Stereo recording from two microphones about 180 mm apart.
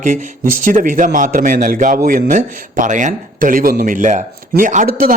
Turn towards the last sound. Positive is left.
turn(degrees=-50)  # may be behind; listen again after turning